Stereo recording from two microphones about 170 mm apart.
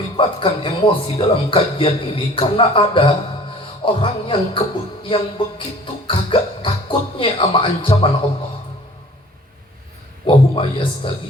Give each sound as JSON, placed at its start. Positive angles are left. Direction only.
{"t": 0.2, "sound": "a man's voice", "side_deg": 30}
{"t": 5.0, "sound": "music", "side_deg": 30}
{"t": 10.2, "sound": "a man's voice", "side_deg": 30}